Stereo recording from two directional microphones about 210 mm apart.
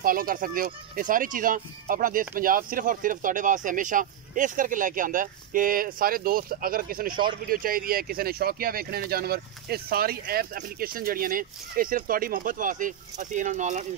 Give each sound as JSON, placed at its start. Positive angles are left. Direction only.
{"t": 0.0, "sound": "speech", "side_deg": -45}